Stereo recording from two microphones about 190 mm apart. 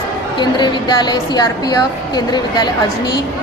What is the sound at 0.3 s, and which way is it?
A woman's voice, 25° left (ahead or behind).